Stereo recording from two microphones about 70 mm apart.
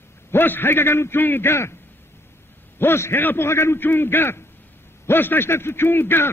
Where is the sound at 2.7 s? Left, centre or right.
Left.